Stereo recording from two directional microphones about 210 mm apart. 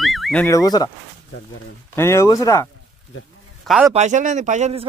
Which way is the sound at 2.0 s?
15° left (ahead or behind).